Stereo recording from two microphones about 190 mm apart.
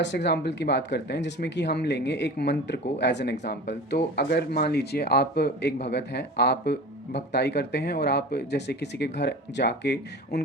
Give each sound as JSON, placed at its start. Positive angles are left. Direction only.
{"t": 0.0, "sound": "speech", "side_deg": 65}